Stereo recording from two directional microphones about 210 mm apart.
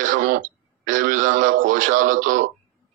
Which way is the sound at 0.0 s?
40° right (ahead or behind).